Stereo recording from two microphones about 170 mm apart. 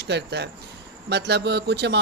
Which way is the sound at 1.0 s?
80° right.